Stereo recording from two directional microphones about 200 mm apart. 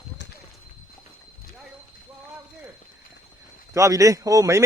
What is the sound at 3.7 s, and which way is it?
Speech, 15° right (ahead or behind).